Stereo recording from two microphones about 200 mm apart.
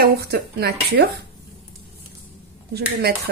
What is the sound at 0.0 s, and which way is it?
Speech, 50° right (ahead or behind).